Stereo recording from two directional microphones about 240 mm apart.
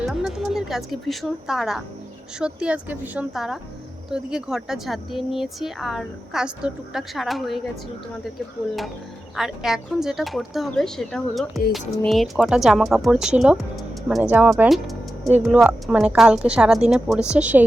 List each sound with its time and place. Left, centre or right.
0.0 s speech: centre
9.3 s speech: centre